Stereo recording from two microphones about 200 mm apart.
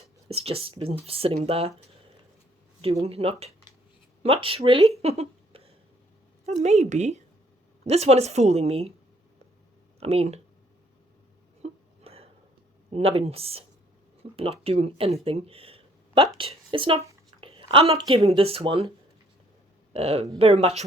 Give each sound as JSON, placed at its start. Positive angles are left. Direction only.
{"t": 0.3, "sound": "speech", "side_deg": -30}
{"t": 2.8, "sound": "a woman's voice", "side_deg": -30}
{"t": 10.0, "sound": "a woman's voice", "side_deg": -30}
{"t": 11.6, "sound": "a sound", "side_deg": -30}
{"t": 12.9, "sound": "speech", "side_deg": -30}
{"t": 19.9, "sound": "a woman's voice", "side_deg": -30}